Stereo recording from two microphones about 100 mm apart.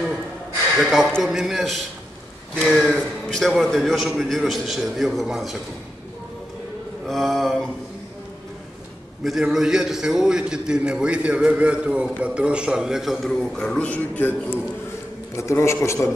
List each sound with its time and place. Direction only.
0.7 s a man's voice: 5° right (ahead or behind)
7.1 s a man's voice: centre (ahead or behind)
9.2 s a man's voice: centre (ahead or behind); by 14.6 s 15° left (ahead or behind)
15.3 s a man's voice: 30° left (ahead or behind)